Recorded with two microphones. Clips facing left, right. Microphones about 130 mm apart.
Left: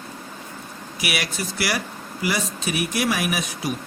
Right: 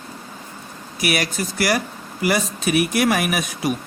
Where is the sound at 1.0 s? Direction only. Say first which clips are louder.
Right 5 dB; 45° right (ahead or behind).